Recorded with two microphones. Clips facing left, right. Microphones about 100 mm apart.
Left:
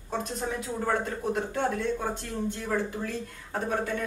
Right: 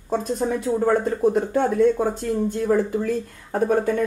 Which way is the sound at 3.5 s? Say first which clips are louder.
Right 9 dB; 45° right (ahead or behind).